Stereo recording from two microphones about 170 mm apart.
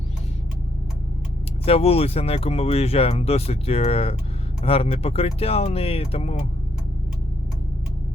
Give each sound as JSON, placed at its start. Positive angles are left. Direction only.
{"t": 1.6, "sound": "speech", "side_deg": 35}